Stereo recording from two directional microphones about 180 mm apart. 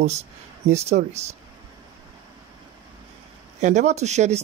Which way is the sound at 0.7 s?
35° right (ahead or behind).